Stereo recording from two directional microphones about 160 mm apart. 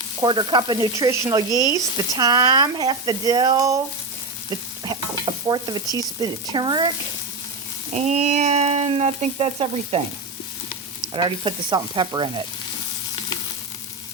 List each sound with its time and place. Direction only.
0.2 s stir: 30° right (ahead or behind)
7.9 s frying: 45° right (ahead or behind)
11.1 s speech: 30° right (ahead or behind)